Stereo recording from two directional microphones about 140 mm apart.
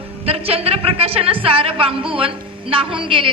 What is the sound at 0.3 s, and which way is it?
A woman's voice, 45° right (ahead or behind).